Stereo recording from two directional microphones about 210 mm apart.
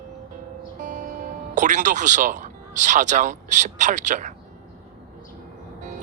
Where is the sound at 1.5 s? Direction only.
35° right (ahead or behind).